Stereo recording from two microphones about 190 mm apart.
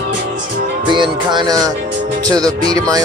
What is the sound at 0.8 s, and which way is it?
Speech, 25° right (ahead or behind).